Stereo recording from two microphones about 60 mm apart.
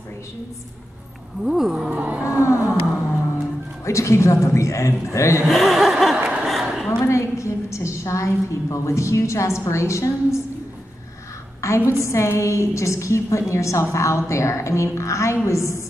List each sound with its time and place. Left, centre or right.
1.4 s speech: centre
1.9 s speech: right
2.2 s a sound: left
3.8 s a woman's voice: left
5.5 s chuckle: centre
6.4 s a sound: centre
7.0 s a woman's voice: left
11.6 s a woman's voice: left